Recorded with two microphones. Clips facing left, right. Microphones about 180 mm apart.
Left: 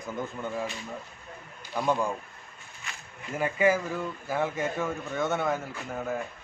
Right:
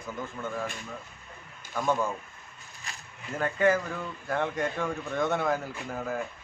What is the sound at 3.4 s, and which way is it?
Speech, 10° left (ahead or behind).